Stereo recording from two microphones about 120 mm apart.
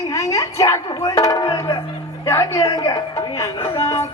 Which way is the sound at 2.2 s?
20° left (ahead or behind).